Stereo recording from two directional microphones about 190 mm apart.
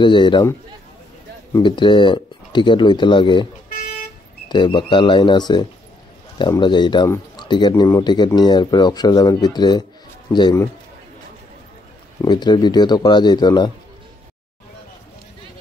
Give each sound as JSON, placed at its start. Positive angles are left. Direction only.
{"t": 0.0, "sound": "speech", "side_deg": 25}
{"t": 1.5, "sound": "speech", "side_deg": 25}
{"t": 4.5, "sound": "speech", "side_deg": 25}
{"t": 12.2, "sound": "speech", "side_deg": 20}